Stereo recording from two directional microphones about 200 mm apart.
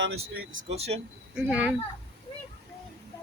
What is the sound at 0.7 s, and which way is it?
Speech, 30° right (ahead or behind).